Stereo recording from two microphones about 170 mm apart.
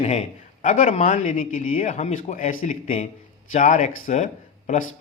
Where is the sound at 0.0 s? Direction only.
40° left (ahead or behind).